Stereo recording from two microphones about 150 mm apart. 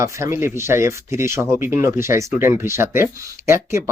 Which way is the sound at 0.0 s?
20° right (ahead or behind).